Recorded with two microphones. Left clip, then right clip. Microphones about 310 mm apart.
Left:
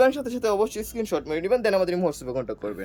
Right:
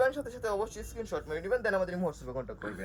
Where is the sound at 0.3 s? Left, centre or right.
Left.